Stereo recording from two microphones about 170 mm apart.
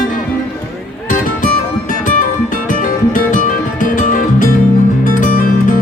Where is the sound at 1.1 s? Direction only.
50° left (ahead or behind).